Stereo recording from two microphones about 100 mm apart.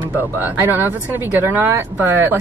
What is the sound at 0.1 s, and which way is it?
Speech, 20° right (ahead or behind).